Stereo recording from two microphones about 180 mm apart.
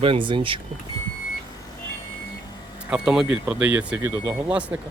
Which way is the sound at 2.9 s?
5° right (ahead or behind).